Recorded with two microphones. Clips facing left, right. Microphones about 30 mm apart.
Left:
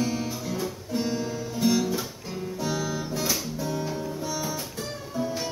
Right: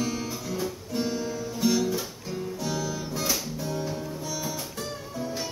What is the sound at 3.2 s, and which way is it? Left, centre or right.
Music, centre.